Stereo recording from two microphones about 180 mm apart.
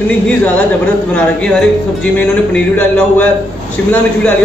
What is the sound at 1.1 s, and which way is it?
A man's voice, 5° left (ahead or behind).